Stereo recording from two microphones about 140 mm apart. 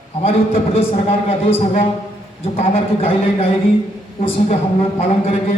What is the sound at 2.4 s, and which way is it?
A woman's voice, 45° left (ahead or behind).